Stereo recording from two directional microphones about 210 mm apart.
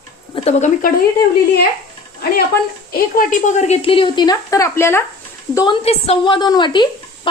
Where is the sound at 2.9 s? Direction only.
40° left (ahead or behind).